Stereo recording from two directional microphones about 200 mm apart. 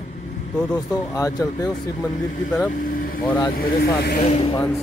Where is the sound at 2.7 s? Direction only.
45° left (ahead or behind).